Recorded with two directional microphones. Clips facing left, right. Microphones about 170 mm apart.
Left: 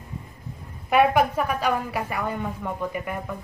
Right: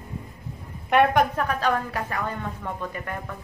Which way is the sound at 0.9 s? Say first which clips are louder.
Even; 5° left (ahead or behind).